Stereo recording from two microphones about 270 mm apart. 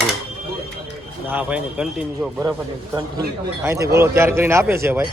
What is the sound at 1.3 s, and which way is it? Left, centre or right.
Speech, centre.